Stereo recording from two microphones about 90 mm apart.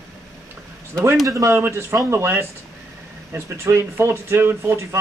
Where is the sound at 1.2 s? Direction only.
35° right (ahead or behind).